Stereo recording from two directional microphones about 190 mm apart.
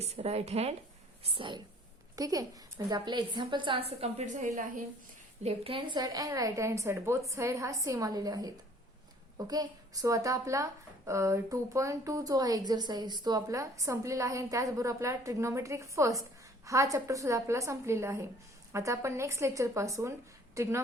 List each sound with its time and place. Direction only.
0.0 s a woman's voice: 35° right (ahead or behind); by 20.8 s 15° right (ahead or behind)